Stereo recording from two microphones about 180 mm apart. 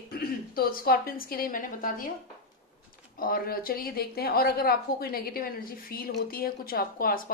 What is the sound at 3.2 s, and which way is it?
A woman's voice, 55° left (ahead or behind).